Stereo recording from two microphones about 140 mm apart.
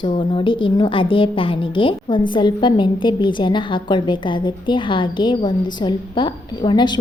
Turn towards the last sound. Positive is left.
turn(degrees=35)  # may be behind; listen again after turning